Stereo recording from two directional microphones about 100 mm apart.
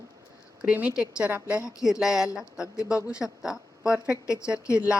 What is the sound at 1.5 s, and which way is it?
Speech, 30° left (ahead or behind).